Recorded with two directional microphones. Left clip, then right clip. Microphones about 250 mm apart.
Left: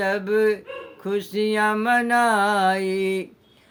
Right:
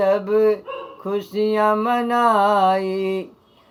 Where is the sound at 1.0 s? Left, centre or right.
Centre.